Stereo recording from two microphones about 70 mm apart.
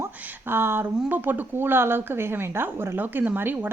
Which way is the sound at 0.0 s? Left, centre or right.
Right.